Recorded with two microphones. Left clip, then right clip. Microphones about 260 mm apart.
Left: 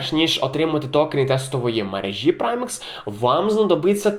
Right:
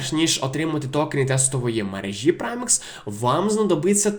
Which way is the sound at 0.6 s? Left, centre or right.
Right.